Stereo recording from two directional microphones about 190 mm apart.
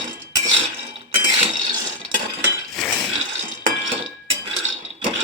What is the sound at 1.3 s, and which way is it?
Cutlery, 30° right (ahead or behind).